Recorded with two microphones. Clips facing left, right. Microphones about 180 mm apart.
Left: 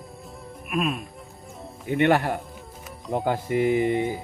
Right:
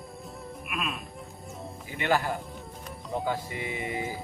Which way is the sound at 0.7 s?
40° left (ahead or behind).